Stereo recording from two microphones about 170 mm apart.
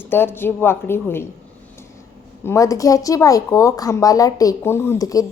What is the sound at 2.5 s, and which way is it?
Speech, 20° left (ahead or behind).